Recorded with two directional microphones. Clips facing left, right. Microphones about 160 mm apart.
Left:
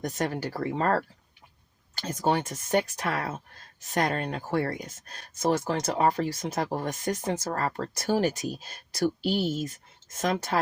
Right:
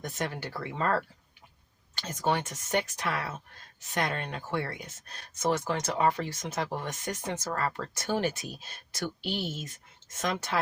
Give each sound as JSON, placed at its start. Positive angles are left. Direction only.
{"t": 0.0, "sound": "speech", "side_deg": 40}